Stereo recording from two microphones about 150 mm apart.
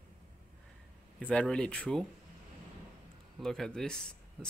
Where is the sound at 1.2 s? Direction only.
5° left (ahead or behind).